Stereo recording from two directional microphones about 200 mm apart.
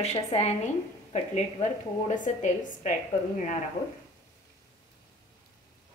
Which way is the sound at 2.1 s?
40° left (ahead or behind).